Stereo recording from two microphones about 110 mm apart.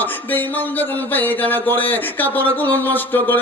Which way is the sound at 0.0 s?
15° left (ahead or behind).